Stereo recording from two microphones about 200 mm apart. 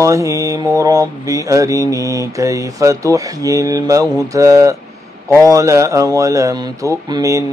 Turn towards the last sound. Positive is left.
turn(degrees=-15)  # may be behind; listen again after turning